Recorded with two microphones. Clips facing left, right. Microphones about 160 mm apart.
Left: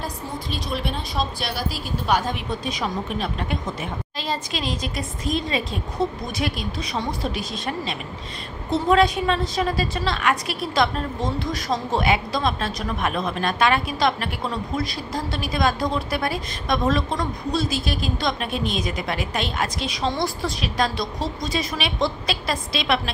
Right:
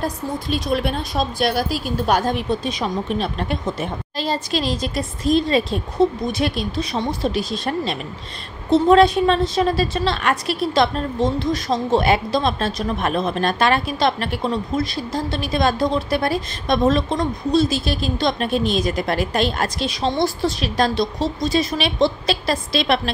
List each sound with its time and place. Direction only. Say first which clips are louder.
0.0 s a woman's voice: right 6 dB; 50° right (ahead or behind)
2.6 s a woman's voice: right 3 dB; 30° right (ahead or behind)